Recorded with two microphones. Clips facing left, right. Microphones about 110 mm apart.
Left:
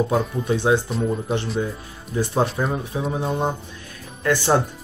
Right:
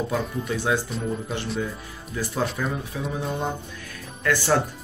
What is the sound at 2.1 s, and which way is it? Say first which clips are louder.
Speech: left 5 dB; 30° left (ahead or behind).